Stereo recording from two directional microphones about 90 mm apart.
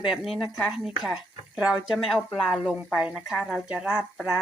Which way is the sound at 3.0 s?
15° right (ahead or behind).